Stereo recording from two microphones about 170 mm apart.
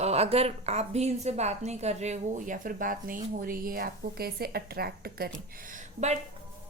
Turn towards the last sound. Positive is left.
turn(degrees=-45)  # may be behind; listen again after turning